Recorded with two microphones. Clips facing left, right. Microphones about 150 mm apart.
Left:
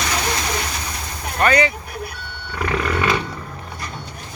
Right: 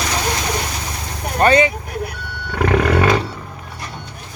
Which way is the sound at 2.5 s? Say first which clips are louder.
Right 6 dB; 70° right (ahead or behind).